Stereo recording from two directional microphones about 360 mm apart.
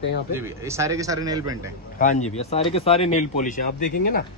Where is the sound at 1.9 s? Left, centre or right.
Centre.